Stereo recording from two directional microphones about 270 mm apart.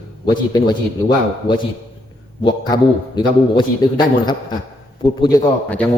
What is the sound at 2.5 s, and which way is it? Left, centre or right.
A man's voice, centre.